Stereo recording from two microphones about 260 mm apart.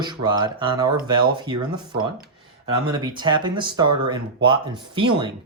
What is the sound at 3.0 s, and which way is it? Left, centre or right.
Speech, centre.